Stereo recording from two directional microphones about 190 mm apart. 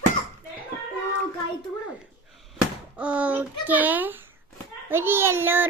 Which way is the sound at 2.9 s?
5° right (ahead or behind).